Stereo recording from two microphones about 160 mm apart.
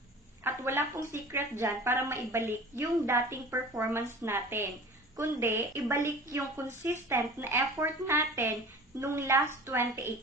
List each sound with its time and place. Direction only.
0.4 s speech: 15° right (ahead or behind)